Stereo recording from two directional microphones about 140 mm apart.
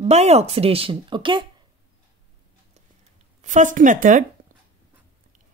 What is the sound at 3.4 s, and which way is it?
Speech, 60° right (ahead or behind).